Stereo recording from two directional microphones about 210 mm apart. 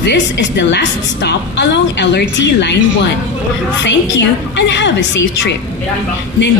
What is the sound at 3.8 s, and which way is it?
Speech, 60° left (ahead or behind).